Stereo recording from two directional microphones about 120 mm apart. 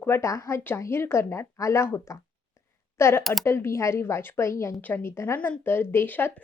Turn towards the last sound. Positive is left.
turn(degrees=15)  # may be behind; listen again after turning